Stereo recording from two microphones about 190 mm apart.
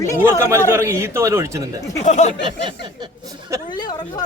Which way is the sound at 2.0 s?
40° left (ahead or behind).